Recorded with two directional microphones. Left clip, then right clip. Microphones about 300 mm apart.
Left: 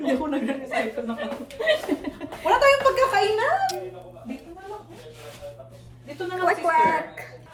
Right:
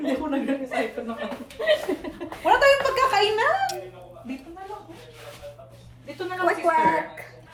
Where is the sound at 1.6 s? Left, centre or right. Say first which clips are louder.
Even; centre.